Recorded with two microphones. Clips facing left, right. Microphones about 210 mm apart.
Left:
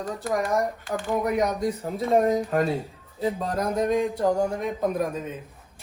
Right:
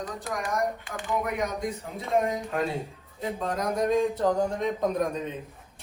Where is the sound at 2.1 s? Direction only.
40° left (ahead or behind).